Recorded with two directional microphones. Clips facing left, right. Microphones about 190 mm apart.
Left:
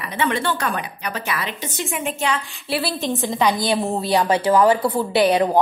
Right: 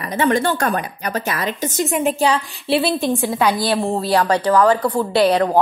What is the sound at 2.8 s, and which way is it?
A woman's voice, 15° right (ahead or behind).